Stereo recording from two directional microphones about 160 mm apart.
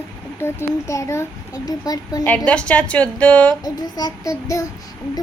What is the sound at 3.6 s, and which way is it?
Child singing, 25° left (ahead or behind).